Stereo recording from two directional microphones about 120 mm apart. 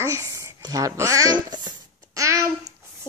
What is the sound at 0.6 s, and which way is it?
Speech, 30° right (ahead or behind).